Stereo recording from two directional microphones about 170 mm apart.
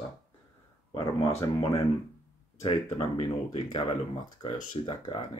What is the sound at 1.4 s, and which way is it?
Speech, 25° left (ahead or behind).